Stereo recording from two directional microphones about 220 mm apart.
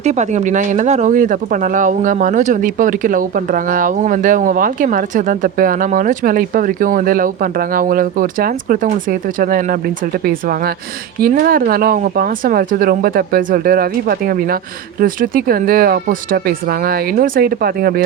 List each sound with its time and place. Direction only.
0.0 s speech: 30° right (ahead or behind)